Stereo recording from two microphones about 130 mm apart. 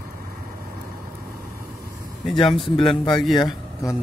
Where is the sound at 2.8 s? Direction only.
35° left (ahead or behind).